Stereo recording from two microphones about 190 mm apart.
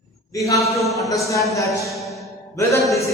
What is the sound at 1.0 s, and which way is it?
Music, 15° left (ahead or behind).